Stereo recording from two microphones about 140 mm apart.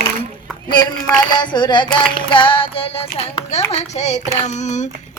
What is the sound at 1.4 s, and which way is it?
Female singing, 30° left (ahead or behind).